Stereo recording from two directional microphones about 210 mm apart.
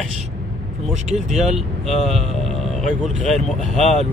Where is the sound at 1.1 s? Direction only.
Centre (ahead or behind).